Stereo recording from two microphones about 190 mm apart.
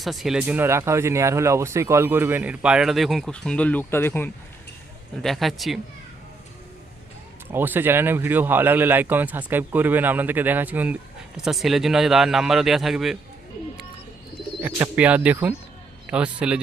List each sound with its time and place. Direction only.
0.0 s speech: centre (ahead or behind)
5.2 s a man's voice: centre (ahead or behind)
7.5 s a man's voice: 10° right (ahead or behind)
14.6 s a man's voice: 10° right (ahead or behind)